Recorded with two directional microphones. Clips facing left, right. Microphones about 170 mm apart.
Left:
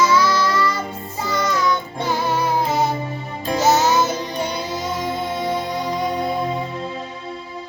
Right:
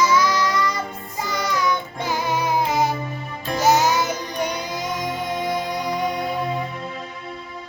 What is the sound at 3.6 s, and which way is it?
Music, 10° right (ahead or behind).